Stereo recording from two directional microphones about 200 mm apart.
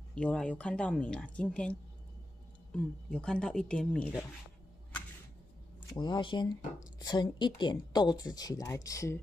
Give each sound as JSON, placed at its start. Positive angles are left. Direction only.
{"t": 0.1, "sound": "a woman's voice", "side_deg": 5}
{"t": 5.9, "sound": "speech", "side_deg": 20}